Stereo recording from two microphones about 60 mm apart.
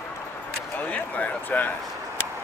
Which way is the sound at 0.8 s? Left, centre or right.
Left.